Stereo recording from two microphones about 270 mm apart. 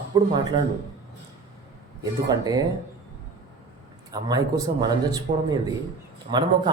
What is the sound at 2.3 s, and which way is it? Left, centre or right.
Speech, centre.